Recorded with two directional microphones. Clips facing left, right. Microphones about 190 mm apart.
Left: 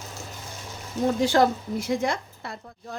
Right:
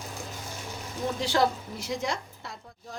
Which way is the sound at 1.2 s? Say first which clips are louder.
Left 4 dB; 50° left (ahead or behind).